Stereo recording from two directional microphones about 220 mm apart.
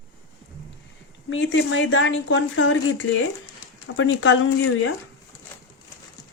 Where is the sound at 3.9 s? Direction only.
60° left (ahead or behind).